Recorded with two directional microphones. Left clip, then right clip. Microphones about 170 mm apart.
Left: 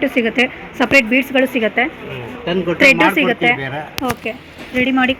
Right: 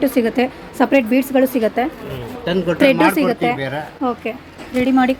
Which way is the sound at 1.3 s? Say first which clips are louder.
Right 1 dB; 15° right (ahead or behind).